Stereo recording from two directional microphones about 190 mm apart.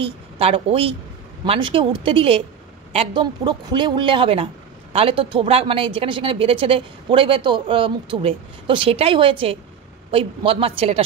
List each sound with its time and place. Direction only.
0.0 s a woman's voice: 30° right (ahead or behind)